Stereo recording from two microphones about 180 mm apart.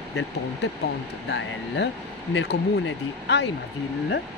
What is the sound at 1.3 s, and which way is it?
Speech, 85° left.